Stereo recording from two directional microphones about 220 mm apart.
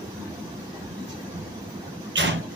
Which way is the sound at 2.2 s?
55° right (ahead or behind).